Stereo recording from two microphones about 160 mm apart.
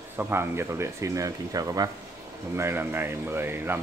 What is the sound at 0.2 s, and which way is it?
Speech, 15° right (ahead or behind).